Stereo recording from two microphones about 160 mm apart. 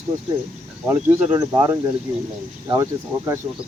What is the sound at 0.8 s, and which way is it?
Speech, 15° right (ahead or behind).